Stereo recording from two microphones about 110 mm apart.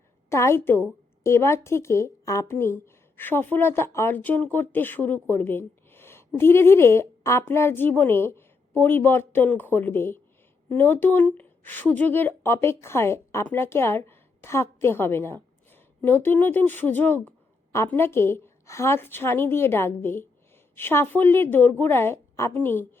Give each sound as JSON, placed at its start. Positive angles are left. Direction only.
{"t": 0.3, "sound": "a woman's voice", "side_deg": 25}